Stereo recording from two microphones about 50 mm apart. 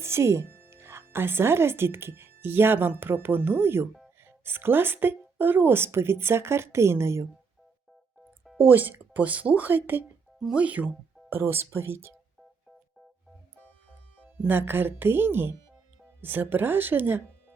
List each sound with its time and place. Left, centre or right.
0.0 s speech: right
0.5 s speech: right
8.5 s speech: right
10.5 s speech: right
11.3 s a woman's voice: right
14.4 s a woman's voice: right